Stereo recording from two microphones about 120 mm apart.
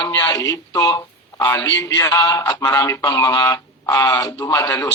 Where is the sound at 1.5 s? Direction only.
20° left (ahead or behind).